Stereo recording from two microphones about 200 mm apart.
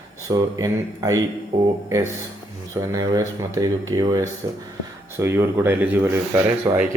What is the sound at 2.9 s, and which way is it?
Speech, 15° right (ahead or behind).